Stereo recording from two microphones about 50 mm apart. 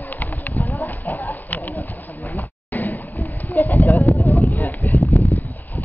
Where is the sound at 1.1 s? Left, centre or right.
Left.